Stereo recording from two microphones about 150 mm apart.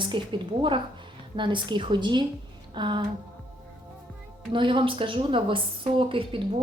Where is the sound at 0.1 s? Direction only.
35° right (ahead or behind).